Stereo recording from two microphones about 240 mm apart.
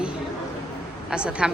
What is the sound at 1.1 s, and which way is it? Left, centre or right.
Speech, centre.